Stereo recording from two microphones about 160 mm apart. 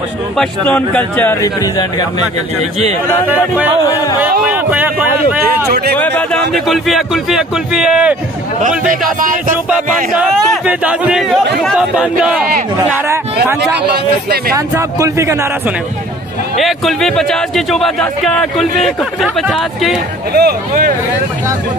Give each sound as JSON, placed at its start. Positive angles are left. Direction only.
{"t": 0.4, "sound": "speech", "side_deg": 10}
{"t": 3.8, "sound": "speech", "side_deg": 20}
{"t": 4.2, "sound": "speech", "side_deg": -10}
{"t": 5.9, "sound": "a man's voice", "side_deg": 10}
{"t": 8.5, "sound": "a man's voice", "side_deg": -55}
{"t": 9.7, "sound": "a man's voice", "side_deg": 0}
{"t": 16.5, "sound": "a man's voice", "side_deg": 0}
{"t": 20.3, "sound": "speech", "side_deg": -70}